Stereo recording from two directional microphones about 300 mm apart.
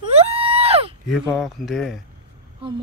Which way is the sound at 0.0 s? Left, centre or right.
Centre.